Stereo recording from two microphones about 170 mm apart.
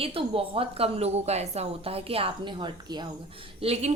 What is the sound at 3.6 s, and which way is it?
Speech, 40° right (ahead or behind).